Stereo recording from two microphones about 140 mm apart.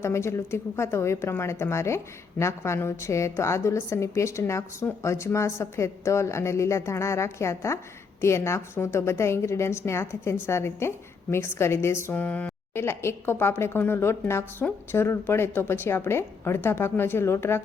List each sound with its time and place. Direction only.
0.0 s a woman's voice: 20° left (ahead or behind)